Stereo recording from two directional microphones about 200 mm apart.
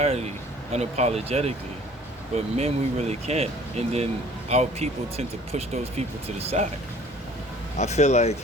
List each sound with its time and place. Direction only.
0.0 s a sound: 30° right (ahead or behind)
0.7 s speech: 35° right (ahead or behind)
7.8 s speech: 35° left (ahead or behind)